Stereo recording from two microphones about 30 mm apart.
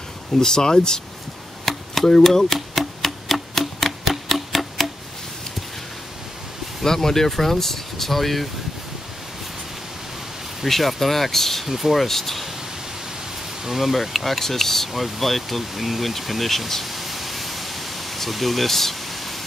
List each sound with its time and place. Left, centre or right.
0.4 s speech: centre
1.7 s a sound: centre
2.2 s typewriter: centre
6.8 s speech: centre
10.7 s speech: centre
11.6 s speech: centre
13.7 s speech: centre
14.9 s speech: centre
16.9 s pink noise: centre